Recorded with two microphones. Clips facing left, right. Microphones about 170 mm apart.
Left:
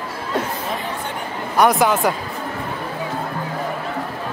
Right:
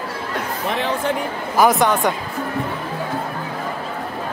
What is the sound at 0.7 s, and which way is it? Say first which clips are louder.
Speech: right 6 dB; 90° right.